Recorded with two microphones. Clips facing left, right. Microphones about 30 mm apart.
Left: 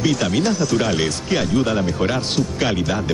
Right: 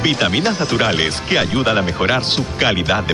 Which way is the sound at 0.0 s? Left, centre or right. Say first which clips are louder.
Right 2 dB; right.